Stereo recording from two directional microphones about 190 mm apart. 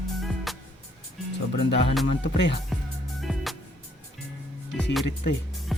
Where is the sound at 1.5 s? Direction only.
65° left (ahead or behind).